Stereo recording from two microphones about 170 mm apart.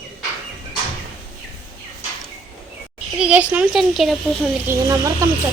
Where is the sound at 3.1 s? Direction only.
5° right (ahead or behind).